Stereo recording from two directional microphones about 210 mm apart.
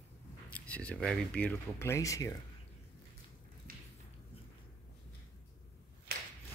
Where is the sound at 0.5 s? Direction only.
5° left (ahead or behind).